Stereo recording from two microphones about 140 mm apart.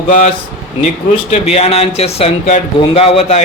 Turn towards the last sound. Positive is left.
turn(degrees=45)  # may be behind; listen again after turning